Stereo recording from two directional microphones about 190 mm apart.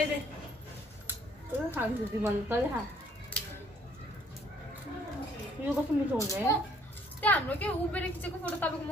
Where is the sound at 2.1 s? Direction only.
15° right (ahead or behind).